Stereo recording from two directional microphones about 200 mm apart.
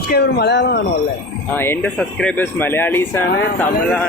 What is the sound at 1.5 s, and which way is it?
Speech, 10° left (ahead or behind).